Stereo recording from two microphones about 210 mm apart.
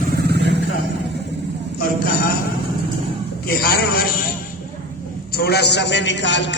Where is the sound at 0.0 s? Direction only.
50° right (ahead or behind).